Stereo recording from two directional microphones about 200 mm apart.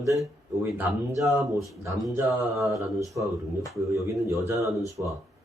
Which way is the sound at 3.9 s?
15° right (ahead or behind).